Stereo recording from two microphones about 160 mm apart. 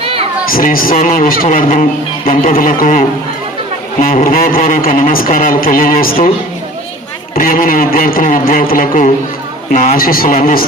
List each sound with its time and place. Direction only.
0.0 s a sound: 35° right (ahead or behind)
0.5 s a man's voice: 60° left (ahead or behind)
7.3 s a man's voice: 60° left (ahead or behind)